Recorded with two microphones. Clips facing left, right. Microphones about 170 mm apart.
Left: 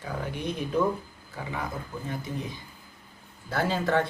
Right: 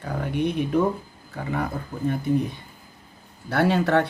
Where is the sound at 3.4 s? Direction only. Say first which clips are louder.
Right 6 dB; 70° right (ahead or behind).